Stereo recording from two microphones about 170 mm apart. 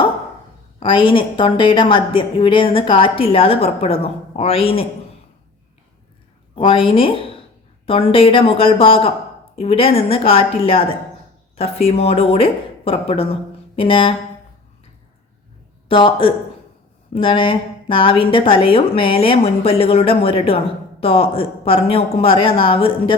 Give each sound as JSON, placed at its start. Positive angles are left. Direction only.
{"t": 0.8, "sound": "a woman's voice", "side_deg": 30}
{"t": 6.6, "sound": "speech", "side_deg": 30}
{"t": 15.9, "sound": "speech", "side_deg": 30}